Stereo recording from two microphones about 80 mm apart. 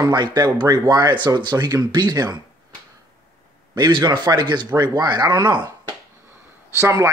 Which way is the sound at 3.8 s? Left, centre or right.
Right.